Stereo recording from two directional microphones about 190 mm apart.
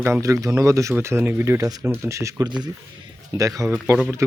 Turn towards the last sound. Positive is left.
turn(degrees=-10)  # may be behind; listen again after turning